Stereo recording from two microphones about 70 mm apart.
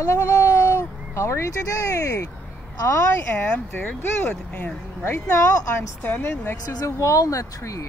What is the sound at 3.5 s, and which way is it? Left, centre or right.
Speech, centre.